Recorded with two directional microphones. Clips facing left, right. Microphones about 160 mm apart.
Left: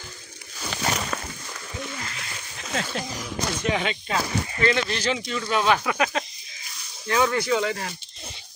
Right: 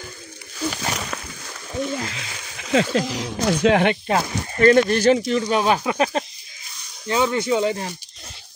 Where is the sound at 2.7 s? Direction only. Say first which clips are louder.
Right 10 dB; 90° right; by 5.2 s 50° right (ahead or behind).